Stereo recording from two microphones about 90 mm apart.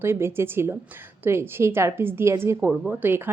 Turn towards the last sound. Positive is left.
turn(degrees=-20)  # may be behind; listen again after turning